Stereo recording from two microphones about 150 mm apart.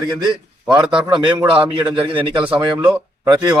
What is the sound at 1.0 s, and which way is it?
A man's voice, 30° right (ahead or behind).